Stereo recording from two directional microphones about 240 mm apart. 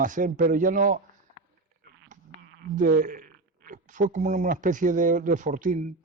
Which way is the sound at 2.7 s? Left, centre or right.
Right.